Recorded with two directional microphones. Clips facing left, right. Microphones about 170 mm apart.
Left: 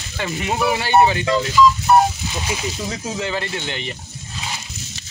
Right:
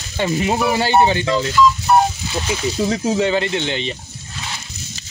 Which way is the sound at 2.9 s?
25° right (ahead or behind).